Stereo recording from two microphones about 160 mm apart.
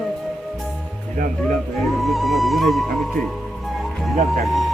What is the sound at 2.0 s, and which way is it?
Speech, centre (ahead or behind).